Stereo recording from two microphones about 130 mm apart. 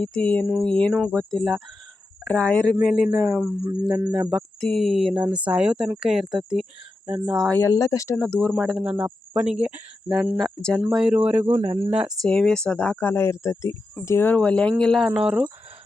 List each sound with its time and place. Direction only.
0.0 s speech: 10° left (ahead or behind)
2.8 s speech: centre (ahead or behind)
3.4 s music: 25° right (ahead or behind)
4.3 s speech: centre (ahead or behind)
7.6 s speech: 25° left (ahead or behind)
8.2 s speech: 5° left (ahead or behind)
10.8 s speech: 5° right (ahead or behind)
12.2 s speech: 5° left (ahead or behind)
15.1 s speech: 10° right (ahead or behind)